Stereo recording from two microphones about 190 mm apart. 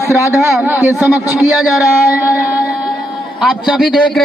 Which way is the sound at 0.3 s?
10° right (ahead or behind).